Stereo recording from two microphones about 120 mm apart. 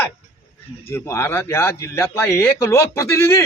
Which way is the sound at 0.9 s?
20° left (ahead or behind).